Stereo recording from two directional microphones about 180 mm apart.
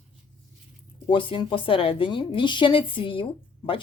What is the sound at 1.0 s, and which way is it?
Speech, 30° left (ahead or behind).